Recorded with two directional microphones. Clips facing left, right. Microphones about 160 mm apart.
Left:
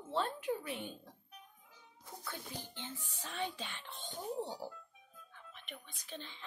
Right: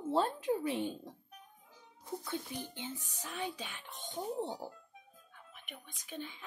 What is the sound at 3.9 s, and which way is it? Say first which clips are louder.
Speech: right 3 dB; 20° right (ahead or behind).